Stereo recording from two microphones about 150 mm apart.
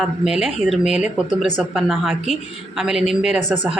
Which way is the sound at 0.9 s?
50° left (ahead or behind).